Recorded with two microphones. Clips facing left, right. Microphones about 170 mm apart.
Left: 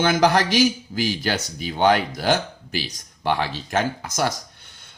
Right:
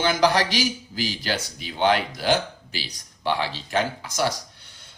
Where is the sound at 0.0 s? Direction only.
50° left (ahead or behind).